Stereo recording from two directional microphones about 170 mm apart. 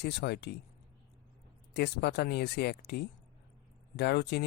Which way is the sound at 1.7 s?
75° left (ahead or behind).